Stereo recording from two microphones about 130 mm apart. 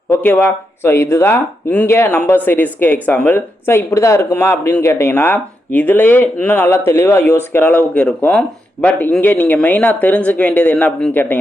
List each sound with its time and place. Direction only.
0.1 s speech: 15° left (ahead or behind)